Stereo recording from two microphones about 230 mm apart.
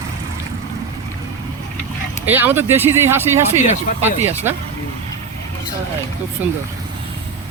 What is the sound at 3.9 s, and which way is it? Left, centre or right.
Speech, left.